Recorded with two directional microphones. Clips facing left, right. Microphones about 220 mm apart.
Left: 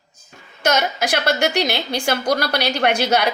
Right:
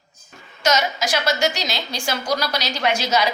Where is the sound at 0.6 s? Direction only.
55° left (ahead or behind).